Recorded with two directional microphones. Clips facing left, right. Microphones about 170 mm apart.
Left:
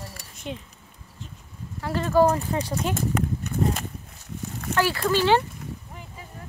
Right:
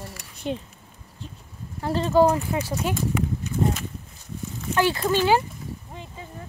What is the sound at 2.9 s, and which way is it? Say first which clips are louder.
Walk: even; 45° left (ahead or behind).